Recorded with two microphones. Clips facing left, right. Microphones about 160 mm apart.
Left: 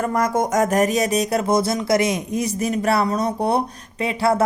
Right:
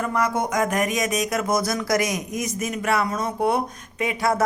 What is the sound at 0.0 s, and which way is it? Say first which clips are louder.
A man's voice: left 3 dB; 45° left (ahead or behind).